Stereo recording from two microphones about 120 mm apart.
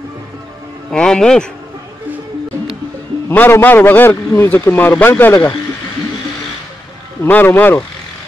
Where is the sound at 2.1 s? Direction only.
15° right (ahead or behind).